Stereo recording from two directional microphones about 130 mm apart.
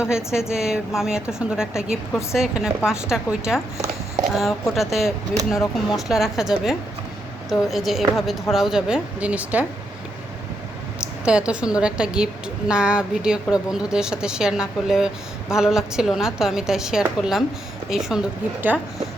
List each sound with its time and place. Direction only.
0.0 s a woman's voice: 5° right (ahead or behind)
11.3 s a woman's voice: 10° right (ahead or behind)